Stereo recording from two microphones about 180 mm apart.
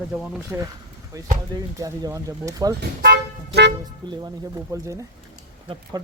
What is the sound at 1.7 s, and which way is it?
Speech, 15° right (ahead or behind).